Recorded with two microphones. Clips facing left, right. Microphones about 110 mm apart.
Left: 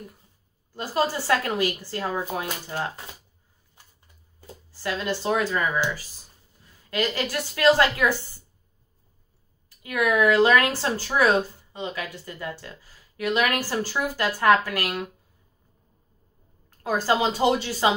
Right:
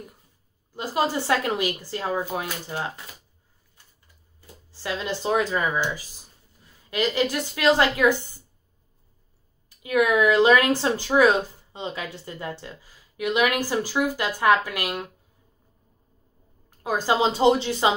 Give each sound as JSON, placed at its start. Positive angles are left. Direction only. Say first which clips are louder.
{"t": 0.7, "sound": "speech", "louder": "right 1 dB", "side_deg": -20}
{"t": 4.6, "sound": "a woman's voice", "louder": "left 1 dB", "side_deg": -20}
{"t": 9.8, "sound": "speech", "louder": "right 1 dB", "side_deg": -20}
{"t": 16.8, "sound": "a woman's voice", "louder": "right 1 dB", "side_deg": -15}